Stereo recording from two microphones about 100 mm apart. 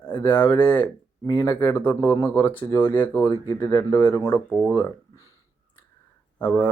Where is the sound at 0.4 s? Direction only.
50° left (ahead or behind).